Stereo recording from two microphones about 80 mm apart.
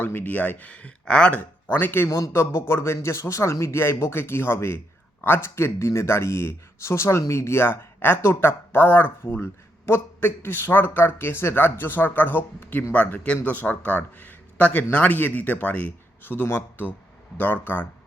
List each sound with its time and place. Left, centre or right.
0.0 s speech: left
2.0 s a man's voice: left
2.3 s speech: left